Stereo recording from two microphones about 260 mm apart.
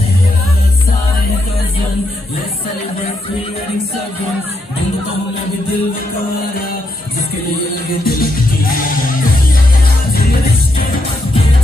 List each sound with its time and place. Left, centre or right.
8.0 s music: left